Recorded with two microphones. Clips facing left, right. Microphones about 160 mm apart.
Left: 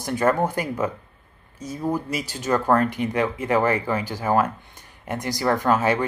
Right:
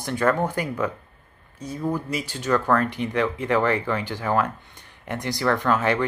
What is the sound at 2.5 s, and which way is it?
Speech, 20° left (ahead or behind).